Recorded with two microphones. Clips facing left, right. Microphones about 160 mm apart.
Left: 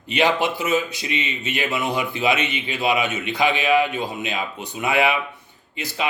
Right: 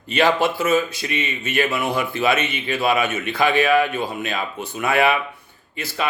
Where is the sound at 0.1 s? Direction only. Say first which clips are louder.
Right 2 dB; 15° left (ahead or behind).